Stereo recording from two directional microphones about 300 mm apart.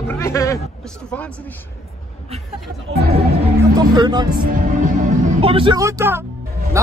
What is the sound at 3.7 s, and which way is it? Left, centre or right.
Speech, centre.